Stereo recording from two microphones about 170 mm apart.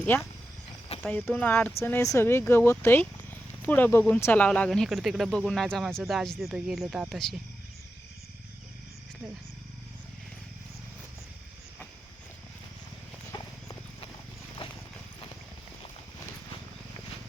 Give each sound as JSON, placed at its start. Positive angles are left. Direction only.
{"t": 1.0, "sound": "speech", "side_deg": 10}
{"t": 13.3, "sound": "clip-clop", "side_deg": 25}
{"t": 14.6, "sound": "clip-clop", "side_deg": 35}